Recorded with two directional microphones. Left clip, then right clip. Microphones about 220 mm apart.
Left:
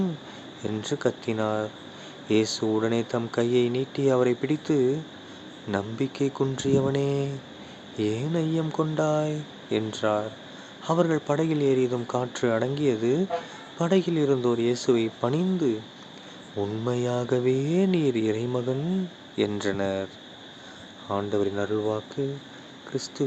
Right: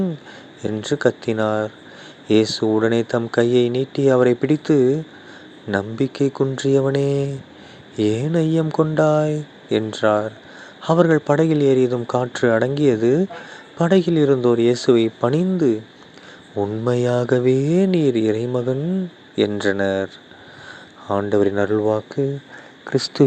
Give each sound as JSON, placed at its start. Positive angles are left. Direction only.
{"t": 0.6, "sound": "speech", "side_deg": -25}
{"t": 21.1, "sound": "speech", "side_deg": -30}